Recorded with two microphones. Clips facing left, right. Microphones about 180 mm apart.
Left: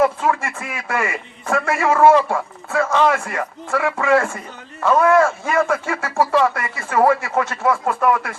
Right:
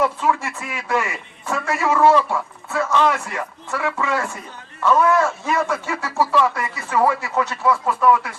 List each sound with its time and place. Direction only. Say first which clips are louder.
0.0 s a man's voice: left 2 dB; 50° left (ahead or behind)